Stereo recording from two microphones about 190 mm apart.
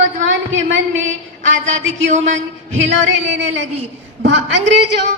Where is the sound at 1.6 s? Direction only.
80° right.